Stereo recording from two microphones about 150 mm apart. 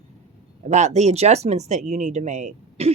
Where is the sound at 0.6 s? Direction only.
50° right (ahead or behind).